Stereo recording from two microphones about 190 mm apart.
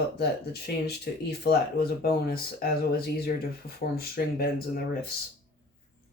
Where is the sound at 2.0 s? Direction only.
55° left (ahead or behind).